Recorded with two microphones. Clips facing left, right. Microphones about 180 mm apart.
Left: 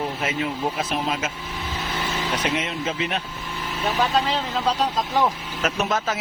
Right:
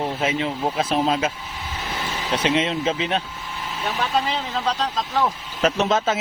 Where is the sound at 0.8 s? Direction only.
30° right (ahead or behind).